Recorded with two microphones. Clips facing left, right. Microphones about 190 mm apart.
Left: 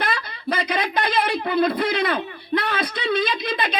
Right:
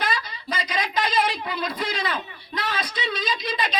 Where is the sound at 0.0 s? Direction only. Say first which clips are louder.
Left 2 dB; 60° left (ahead or behind).